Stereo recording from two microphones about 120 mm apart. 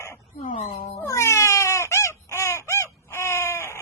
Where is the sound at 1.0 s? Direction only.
25° left (ahead or behind).